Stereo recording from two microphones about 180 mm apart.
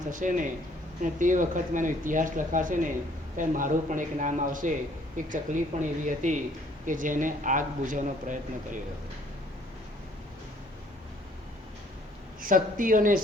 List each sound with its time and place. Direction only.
0.1 s speech: 45° right (ahead or behind)
12.4 s speech: 50° right (ahead or behind)